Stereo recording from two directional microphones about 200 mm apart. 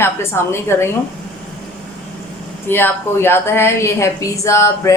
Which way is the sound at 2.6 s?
10° left (ahead or behind).